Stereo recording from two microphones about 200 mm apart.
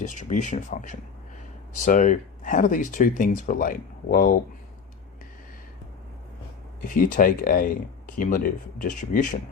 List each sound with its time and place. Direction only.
0.0 s speech: 35° left (ahead or behind)
6.8 s speech: 40° left (ahead or behind)